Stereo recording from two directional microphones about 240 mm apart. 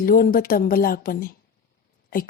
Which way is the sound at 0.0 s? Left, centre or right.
Left.